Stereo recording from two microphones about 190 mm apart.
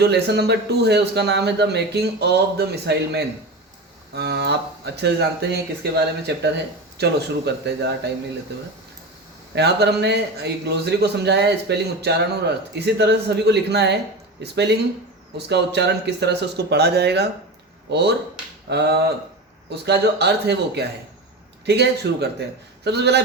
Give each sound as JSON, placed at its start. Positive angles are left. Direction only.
{"t": 0.0, "sound": "a man's voice", "side_deg": -60}
{"t": 9.6, "sound": "a man's voice", "side_deg": -60}